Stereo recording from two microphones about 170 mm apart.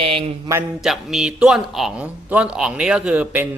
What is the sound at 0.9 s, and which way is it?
A man's voice, 5° right (ahead or behind).